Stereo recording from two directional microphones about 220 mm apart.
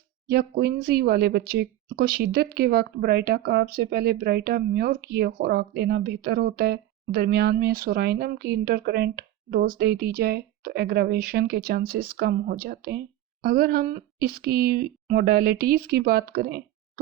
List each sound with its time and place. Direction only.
0.3 s speech: 45° right (ahead or behind)